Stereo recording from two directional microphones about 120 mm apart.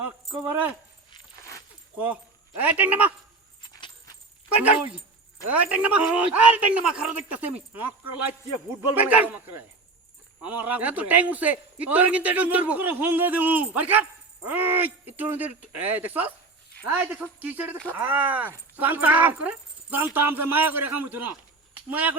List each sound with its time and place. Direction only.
0.4 s a man's voice: 15° right (ahead or behind)
2.6 s a man's voice: 15° right (ahead or behind)
3.6 s a sound: 40° left (ahead or behind)
4.5 s a man's voice: 10° right (ahead or behind)
8.9 s a man's voice: 15° right (ahead or behind)